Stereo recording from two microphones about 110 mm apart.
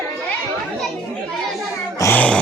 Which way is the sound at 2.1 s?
10° left (ahead or behind).